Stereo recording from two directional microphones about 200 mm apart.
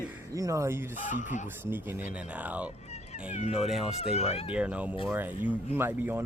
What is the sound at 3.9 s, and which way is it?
Speech, 30° left (ahead or behind).